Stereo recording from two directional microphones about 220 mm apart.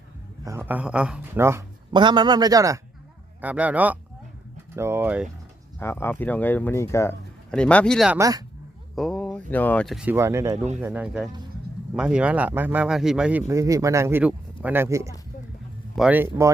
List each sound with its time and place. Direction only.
0.4 s speech: 10° right (ahead or behind)
5.8 s speech: 10° left (ahead or behind)
8.2 s speech: 15° right (ahead or behind)
9.0 s speech: centre (ahead or behind)